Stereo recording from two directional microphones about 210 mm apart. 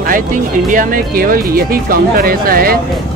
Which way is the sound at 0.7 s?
40° right (ahead or behind).